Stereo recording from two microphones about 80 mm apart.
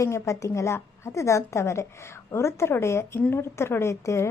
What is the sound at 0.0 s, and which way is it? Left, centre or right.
Speech, left.